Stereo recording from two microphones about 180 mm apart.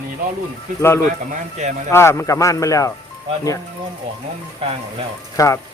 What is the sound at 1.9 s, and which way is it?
Speech, 15° left (ahead or behind).